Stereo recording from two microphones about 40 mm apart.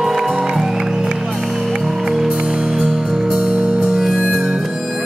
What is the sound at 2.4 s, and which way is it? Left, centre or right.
Music, right.